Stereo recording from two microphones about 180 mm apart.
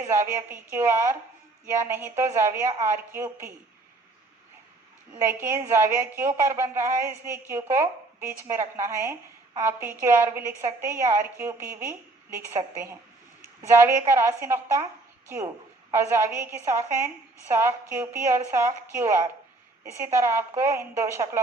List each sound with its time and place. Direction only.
0.0 s a woman's voice: 15° right (ahead or behind)
5.1 s a woman's voice: 10° right (ahead or behind)
15.9 s a woman's voice: 15° right (ahead or behind)